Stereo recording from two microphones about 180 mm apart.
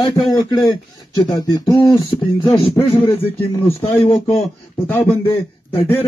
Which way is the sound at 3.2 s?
35° left (ahead or behind).